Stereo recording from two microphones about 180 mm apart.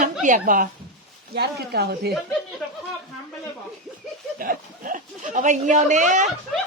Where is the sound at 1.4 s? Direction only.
65° right (ahead or behind).